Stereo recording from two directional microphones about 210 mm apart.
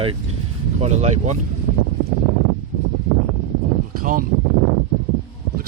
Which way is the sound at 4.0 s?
45° right (ahead or behind).